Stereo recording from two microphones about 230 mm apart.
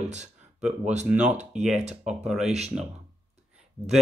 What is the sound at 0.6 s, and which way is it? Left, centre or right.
Speech, centre.